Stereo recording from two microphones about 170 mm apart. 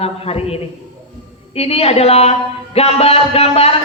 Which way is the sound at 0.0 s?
35° left (ahead or behind).